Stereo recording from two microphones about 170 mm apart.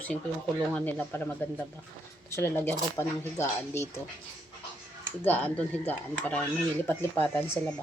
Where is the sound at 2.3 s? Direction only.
15° left (ahead or behind).